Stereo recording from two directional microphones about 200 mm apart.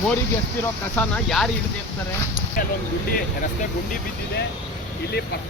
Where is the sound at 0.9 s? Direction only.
Centre (ahead or behind).